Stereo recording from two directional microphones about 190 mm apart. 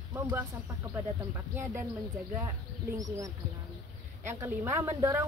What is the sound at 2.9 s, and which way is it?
Speech, 15° right (ahead or behind).